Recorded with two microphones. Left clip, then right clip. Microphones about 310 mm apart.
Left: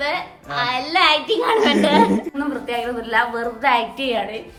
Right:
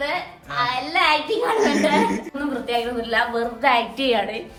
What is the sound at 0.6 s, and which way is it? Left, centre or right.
Speech, left.